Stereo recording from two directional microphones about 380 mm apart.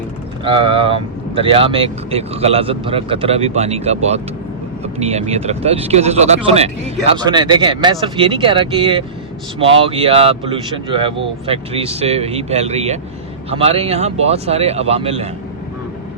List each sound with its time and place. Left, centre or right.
0.4 s speech: centre